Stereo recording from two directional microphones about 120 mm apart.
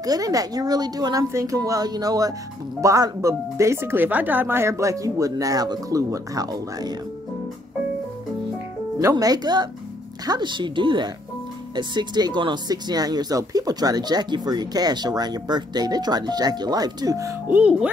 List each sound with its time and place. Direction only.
0.0 s speech: 30° right (ahead or behind)
9.1 s speech: 35° right (ahead or behind)
17.5 s speech: 10° right (ahead or behind)